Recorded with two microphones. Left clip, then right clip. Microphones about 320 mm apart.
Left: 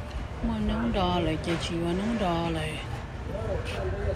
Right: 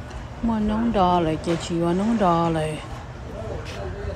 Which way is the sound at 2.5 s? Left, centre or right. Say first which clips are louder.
Right 7 dB; right.